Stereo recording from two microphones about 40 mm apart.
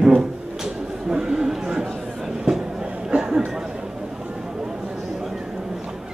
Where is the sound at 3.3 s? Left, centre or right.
Centre.